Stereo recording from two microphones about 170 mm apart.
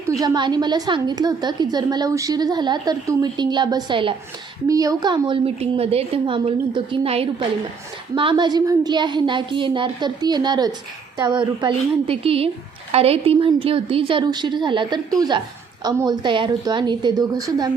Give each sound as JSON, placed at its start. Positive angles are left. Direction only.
{"t": 0.2, "sound": "a woman's voice", "side_deg": -25}